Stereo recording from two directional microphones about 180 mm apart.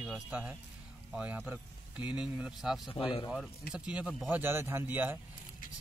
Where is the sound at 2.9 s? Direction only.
30° left (ahead or behind).